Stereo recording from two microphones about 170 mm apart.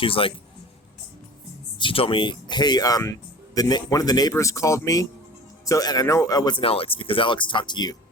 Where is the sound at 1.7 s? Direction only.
30° left (ahead or behind).